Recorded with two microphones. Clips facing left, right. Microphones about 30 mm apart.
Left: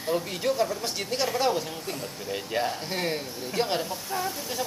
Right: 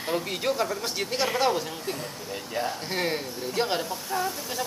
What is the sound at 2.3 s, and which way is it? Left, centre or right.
Speech, centre.